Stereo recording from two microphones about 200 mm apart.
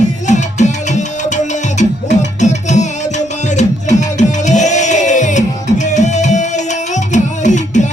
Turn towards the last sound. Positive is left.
turn(degrees=35)  # may be behind; listen again after turning